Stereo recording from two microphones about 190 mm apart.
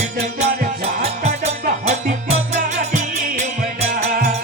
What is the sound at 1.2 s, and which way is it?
Music, 35° right (ahead or behind).